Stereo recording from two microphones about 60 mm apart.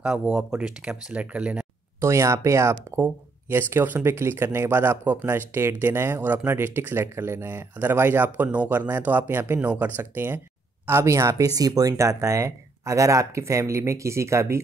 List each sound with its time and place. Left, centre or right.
0.0 s speech: centre
2.0 s speech: right
3.0 s speech: right
10.9 s speech: right
11.4 s speech: right